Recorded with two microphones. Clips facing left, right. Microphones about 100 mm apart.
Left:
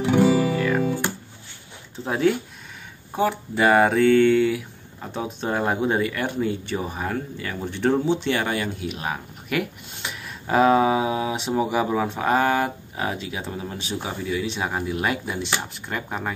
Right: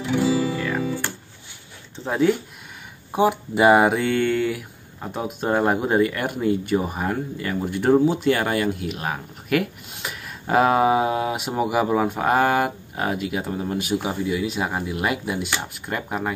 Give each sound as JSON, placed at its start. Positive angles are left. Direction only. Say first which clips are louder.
{"t": 0.0, "sound": "music", "louder": "left 3 dB", "side_deg": 50}
{"t": 0.6, "sound": "music", "louder": "left 3 dB", "side_deg": 0}
{"t": 2.0, "sound": "speech", "louder": "right 1 dB", "side_deg": 0}
{"t": 3.1, "sound": "speech", "louder": "right 3 dB", "side_deg": -15}